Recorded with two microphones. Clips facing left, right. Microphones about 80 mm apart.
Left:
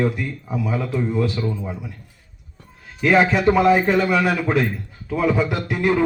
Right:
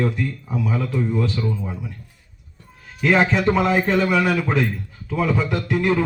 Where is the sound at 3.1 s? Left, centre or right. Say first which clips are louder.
Left 2 dB; centre.